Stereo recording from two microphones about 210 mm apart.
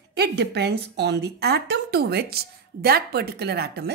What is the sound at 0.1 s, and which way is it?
A woman's voice, 50° right (ahead or behind).